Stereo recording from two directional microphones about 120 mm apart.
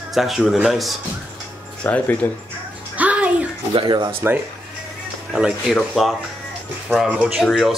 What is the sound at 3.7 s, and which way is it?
Speech, 40° right (ahead or behind).